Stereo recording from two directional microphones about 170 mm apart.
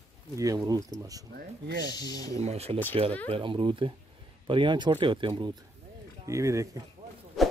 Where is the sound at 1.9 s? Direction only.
25° left (ahead or behind).